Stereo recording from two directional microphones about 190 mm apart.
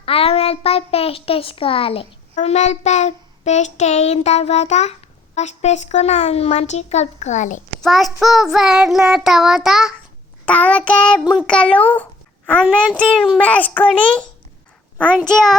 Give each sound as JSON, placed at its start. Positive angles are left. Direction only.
{"t": 0.0, "sound": "a child's voice", "side_deg": 30}
{"t": 7.8, "sound": "child singing", "side_deg": 0}
{"t": 10.4, "sound": "a child's voice", "side_deg": 5}
{"t": 11.2, "sound": "child singing", "side_deg": -5}
{"t": 13.0, "sound": "a child's voice", "side_deg": 5}
{"t": 15.3, "sound": "child singing", "side_deg": 0}